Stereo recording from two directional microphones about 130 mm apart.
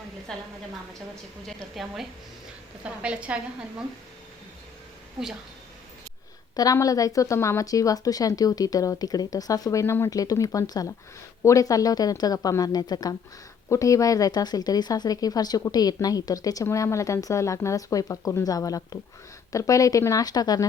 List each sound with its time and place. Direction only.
0.3 s a woman's voice: 5° left (ahead or behind)
1.5 s a woman's voice: centre (ahead or behind)
6.6 s speech: 25° left (ahead or behind)